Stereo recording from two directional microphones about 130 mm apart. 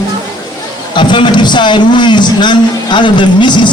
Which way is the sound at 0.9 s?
35° left (ahead or behind).